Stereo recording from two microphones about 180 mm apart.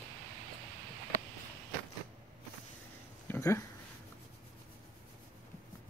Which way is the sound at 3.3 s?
15° left (ahead or behind).